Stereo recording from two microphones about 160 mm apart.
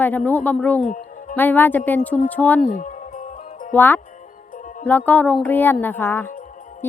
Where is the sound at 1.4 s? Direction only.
10° left (ahead or behind).